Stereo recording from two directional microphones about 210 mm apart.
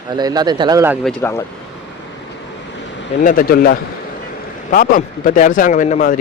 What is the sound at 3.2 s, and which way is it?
A man's voice, 40° left (ahead or behind).